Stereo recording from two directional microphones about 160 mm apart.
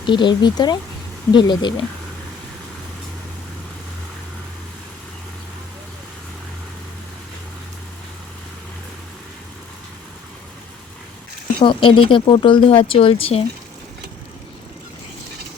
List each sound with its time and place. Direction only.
0.0 s speech: 30° left (ahead or behind)
11.6 s speech: 30° left (ahead or behind)